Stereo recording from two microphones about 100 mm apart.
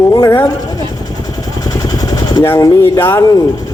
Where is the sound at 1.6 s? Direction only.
40° left (ahead or behind).